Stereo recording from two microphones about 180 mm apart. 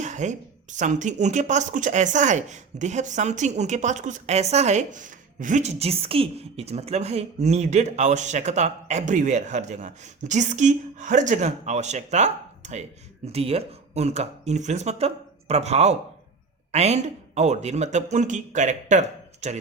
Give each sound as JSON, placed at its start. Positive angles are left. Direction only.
{"t": 0.0, "sound": "speech", "side_deg": -40}